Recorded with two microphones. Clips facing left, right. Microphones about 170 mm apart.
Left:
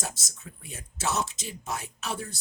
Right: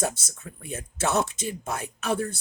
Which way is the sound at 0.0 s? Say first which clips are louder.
Right 9 dB; 55° right (ahead or behind).